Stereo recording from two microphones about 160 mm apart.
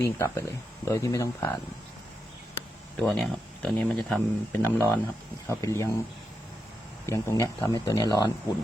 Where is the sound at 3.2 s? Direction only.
Centre (ahead or behind); by 5.9 s 20° left (ahead or behind).